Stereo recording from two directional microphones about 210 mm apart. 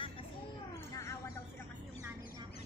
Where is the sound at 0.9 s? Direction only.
15° left (ahead or behind).